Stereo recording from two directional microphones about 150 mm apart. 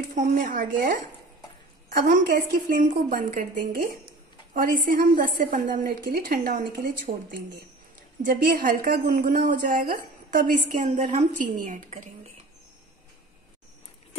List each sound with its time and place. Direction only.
0.1 s a woman's voice: 65° right (ahead or behind); by 7.3 s 90° right
8.2 s a woman's voice: 70° right (ahead or behind)